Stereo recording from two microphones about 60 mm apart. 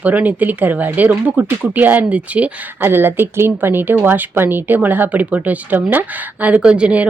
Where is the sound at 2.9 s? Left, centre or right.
Right.